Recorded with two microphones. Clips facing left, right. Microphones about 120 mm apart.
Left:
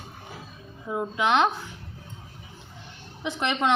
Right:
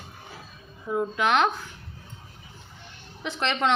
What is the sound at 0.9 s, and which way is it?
Speech, 15° left (ahead or behind).